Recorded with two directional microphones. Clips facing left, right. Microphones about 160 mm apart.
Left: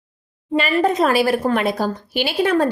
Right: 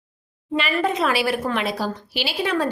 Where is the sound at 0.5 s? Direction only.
40° left (ahead or behind).